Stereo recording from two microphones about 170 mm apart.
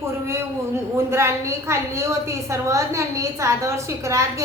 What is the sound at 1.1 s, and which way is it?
A woman's voice, 15° right (ahead or behind).